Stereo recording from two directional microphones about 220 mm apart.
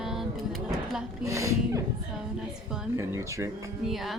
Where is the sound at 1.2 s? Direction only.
15° right (ahead or behind).